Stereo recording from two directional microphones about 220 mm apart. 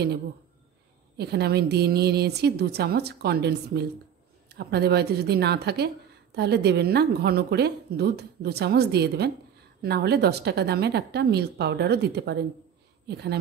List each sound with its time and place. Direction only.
1.1 s a woman's voice: 50° right (ahead or behind)